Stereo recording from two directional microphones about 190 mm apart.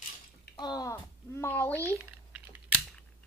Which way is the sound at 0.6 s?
20° left (ahead or behind).